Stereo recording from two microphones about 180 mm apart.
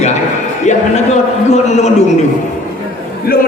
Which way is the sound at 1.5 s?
40° left (ahead or behind).